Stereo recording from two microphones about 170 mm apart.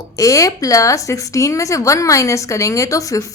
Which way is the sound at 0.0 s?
20° left (ahead or behind).